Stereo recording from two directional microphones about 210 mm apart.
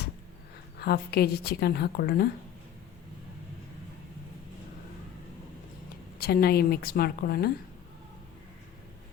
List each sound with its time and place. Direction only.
0.8 s a woman's voice: 50° left (ahead or behind)
6.1 s a woman's voice: 50° left (ahead or behind)